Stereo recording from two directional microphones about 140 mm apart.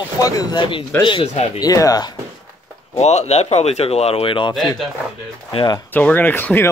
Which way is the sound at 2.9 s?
50° left (ahead or behind).